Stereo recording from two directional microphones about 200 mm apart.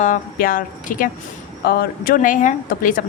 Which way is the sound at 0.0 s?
45° left (ahead or behind).